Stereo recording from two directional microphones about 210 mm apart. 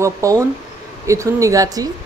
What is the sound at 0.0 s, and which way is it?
Speech, 15° right (ahead or behind).